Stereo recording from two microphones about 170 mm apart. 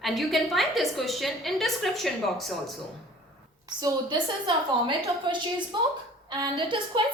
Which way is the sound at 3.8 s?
25° right (ahead or behind).